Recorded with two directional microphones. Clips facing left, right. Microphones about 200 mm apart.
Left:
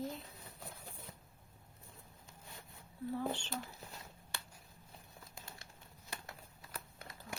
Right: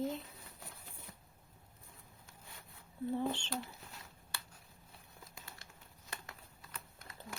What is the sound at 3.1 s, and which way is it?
Speech, 25° right (ahead or behind).